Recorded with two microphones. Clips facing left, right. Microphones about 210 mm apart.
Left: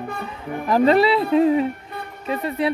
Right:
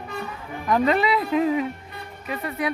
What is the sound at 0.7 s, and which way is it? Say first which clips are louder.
A woman's voice: left 5 dB; 35° left (ahead or behind).